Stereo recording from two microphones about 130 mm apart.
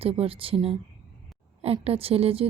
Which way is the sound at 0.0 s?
50° right (ahead or behind).